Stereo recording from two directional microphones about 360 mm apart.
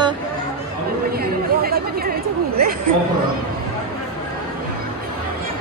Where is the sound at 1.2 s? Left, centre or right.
Right.